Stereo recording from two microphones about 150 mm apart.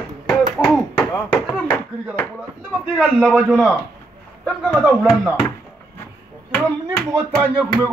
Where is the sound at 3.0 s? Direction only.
5° right (ahead or behind).